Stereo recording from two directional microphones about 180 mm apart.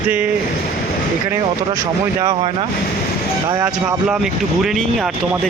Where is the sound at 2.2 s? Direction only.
30° right (ahead or behind).